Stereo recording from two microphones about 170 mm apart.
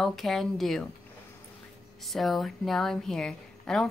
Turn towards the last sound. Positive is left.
turn(degrees=5)  # may be behind; listen again after turning